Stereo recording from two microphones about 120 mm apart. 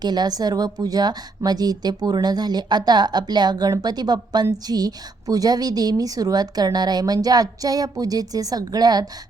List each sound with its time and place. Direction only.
0.0 s a woman's voice: 35° right (ahead or behind)